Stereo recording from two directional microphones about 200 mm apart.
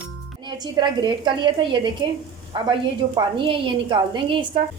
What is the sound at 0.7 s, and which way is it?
A woman's voice, 20° right (ahead or behind).